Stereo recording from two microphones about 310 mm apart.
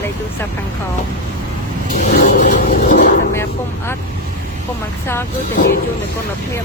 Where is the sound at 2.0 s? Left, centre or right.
Left.